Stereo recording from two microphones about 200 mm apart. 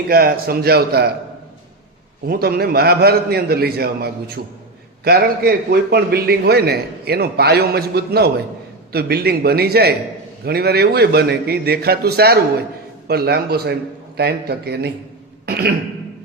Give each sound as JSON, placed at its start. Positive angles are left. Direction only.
{"t": 0.1, "sound": "a man's voice", "side_deg": -50}
{"t": 2.2, "sound": "a man's voice", "side_deg": -50}
{"t": 15.4, "sound": "throat clearing", "side_deg": -50}